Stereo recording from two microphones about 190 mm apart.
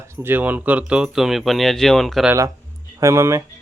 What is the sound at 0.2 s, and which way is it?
Speech, 10° right (ahead or behind).